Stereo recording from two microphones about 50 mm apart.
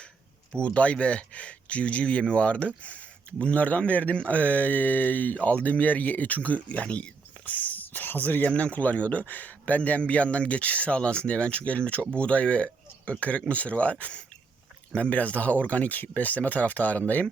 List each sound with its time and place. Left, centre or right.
0.6 s speech: left